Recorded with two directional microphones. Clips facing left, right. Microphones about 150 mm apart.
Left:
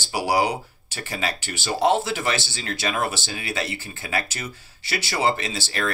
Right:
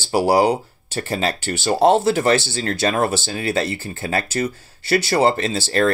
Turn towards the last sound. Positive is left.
turn(degrees=-40)  # may be behind; listen again after turning